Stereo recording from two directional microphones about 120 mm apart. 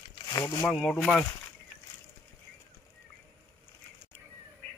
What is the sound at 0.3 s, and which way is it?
Speech, 30° left (ahead or behind).